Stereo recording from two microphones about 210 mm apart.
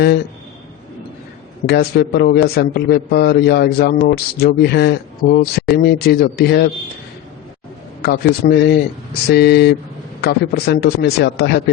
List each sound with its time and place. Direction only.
1.6 s a man's voice: 50° left (ahead or behind)
8.0 s a man's voice: 45° left (ahead or behind)